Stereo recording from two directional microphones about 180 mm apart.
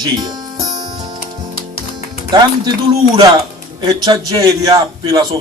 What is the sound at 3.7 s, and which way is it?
A man's voice, 20° right (ahead or behind).